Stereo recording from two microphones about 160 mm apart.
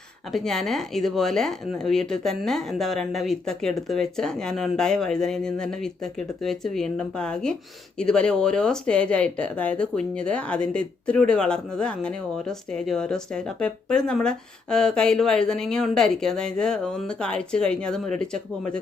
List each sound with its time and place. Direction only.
0.3 s speech: centre (ahead or behind)